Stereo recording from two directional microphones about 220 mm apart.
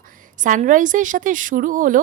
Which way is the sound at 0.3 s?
35° right (ahead or behind).